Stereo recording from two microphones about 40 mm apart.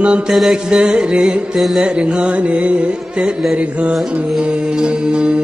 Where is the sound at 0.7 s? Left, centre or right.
Right.